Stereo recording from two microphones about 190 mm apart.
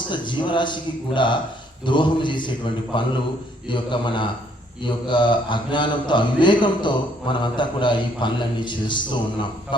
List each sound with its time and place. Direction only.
0.1 s a man's voice: 25° left (ahead or behind)